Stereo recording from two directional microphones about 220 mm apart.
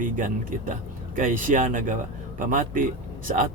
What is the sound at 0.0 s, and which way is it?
A man's voice, 40° right (ahead or behind).